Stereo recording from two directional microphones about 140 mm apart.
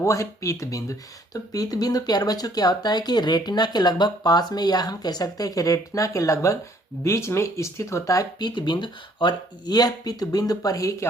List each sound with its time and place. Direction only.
0.0 s speech: 20° left (ahead or behind)